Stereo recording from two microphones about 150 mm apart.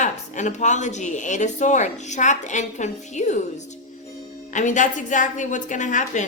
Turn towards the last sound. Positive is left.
turn(degrees=55)  # may be behind; listen again after turning